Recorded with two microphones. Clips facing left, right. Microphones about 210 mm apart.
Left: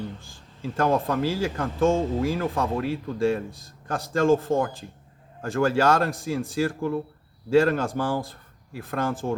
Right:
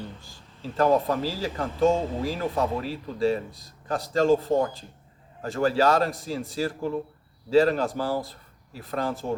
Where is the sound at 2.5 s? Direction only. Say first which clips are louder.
Left 1 dB; 50° left (ahead or behind).